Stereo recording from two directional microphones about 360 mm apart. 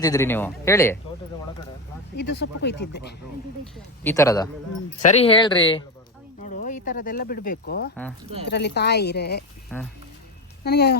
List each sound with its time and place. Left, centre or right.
0.0 s a man's voice: centre
2.1 s speech: left
3.6 s a man's voice: centre
6.4 s a sound: left
6.8 s speech: left
9.7 s speech: centre
10.6 s speech: left